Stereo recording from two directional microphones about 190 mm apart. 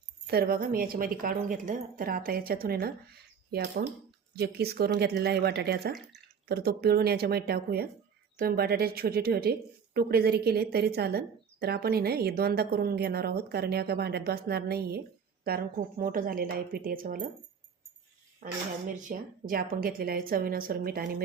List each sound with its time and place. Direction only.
0.3 s a woman's voice: 55° right (ahead or behind)
18.4 s a woman's voice: 40° right (ahead or behind)